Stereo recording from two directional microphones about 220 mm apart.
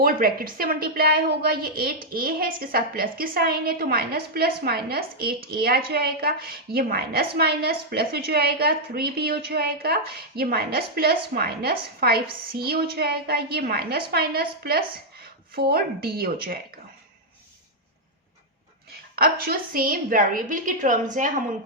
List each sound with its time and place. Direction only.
0.0 s a woman's voice: 40° right (ahead or behind)
18.9 s a woman's voice: 45° right (ahead or behind)